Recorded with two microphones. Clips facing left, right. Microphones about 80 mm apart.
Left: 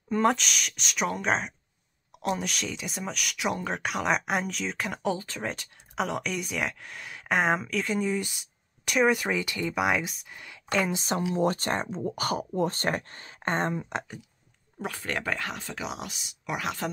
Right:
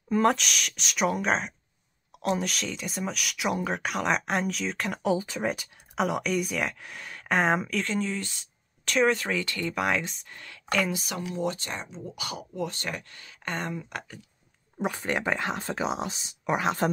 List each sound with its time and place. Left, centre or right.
0.1 s speech: centre
5.1 s speech: centre
7.8 s speech: centre
10.7 s speech: left
11.3 s speech: left
14.8 s speech: centre